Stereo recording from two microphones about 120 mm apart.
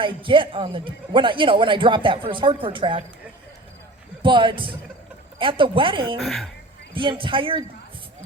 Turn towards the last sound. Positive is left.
turn(degrees=-45)  # may be behind; listen again after turning